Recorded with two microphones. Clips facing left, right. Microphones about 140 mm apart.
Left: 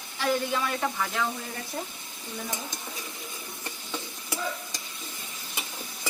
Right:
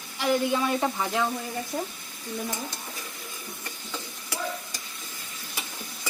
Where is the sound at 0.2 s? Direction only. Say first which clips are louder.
Right 3 dB; 20° right (ahead or behind).